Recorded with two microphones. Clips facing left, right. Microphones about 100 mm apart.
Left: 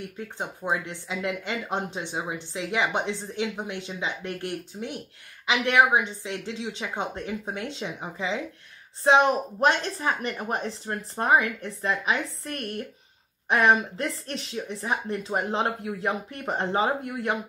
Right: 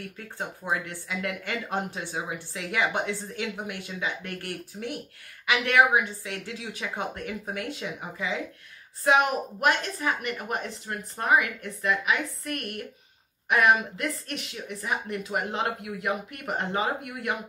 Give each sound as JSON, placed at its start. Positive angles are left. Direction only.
{"t": 0.0, "sound": "speech", "side_deg": 20}